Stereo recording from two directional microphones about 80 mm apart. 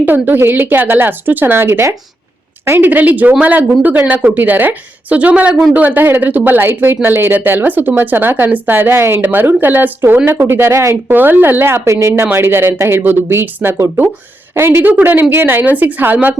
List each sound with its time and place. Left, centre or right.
0.0 s a woman's voice: right
11.1 s a woman's voice: right